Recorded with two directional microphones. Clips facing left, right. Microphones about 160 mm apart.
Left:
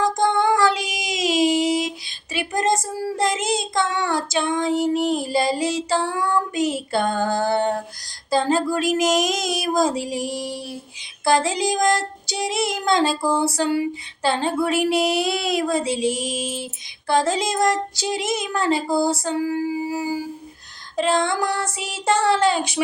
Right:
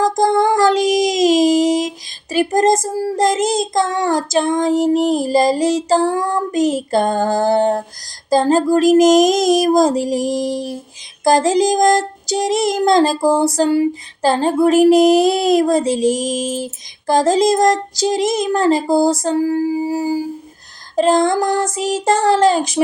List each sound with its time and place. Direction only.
0.0 s child singing: 40° right (ahead or behind)
8.3 s a sound: 40° right (ahead or behind)
11.2 s child singing: 40° right (ahead or behind)